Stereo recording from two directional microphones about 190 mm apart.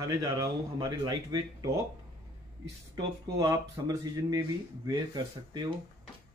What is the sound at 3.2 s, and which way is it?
Speech, 20° right (ahead or behind).